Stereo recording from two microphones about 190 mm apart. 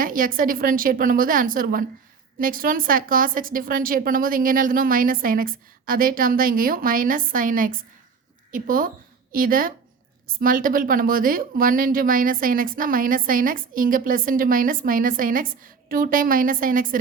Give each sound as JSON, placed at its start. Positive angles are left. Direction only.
{"t": 0.0, "sound": "a woman's voice", "side_deg": -45}